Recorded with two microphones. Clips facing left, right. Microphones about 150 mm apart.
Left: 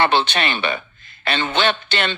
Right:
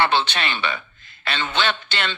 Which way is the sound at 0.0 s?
55° left (ahead or behind).